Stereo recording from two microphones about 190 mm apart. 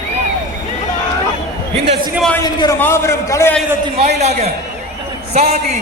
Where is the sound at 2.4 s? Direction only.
20° left (ahead or behind).